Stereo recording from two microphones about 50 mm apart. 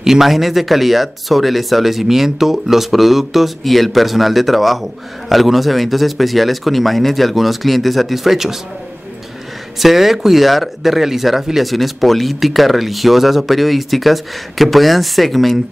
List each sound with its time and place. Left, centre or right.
0.0 s speech: centre
9.8 s speech: centre